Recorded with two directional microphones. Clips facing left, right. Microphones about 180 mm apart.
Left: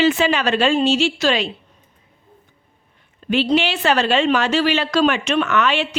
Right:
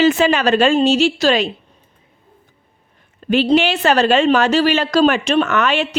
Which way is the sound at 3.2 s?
45° right (ahead or behind).